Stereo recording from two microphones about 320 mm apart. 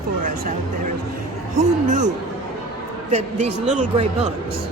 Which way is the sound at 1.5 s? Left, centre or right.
Right.